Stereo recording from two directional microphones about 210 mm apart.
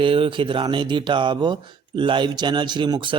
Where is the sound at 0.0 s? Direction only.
25° right (ahead or behind).